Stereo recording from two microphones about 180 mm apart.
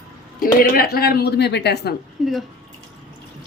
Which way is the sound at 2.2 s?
Centre (ahead or behind).